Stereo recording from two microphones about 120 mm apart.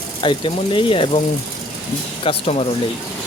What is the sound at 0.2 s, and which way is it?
Speech, 45° left (ahead or behind).